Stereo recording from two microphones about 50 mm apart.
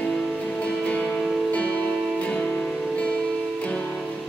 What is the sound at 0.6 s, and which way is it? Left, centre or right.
Music, left.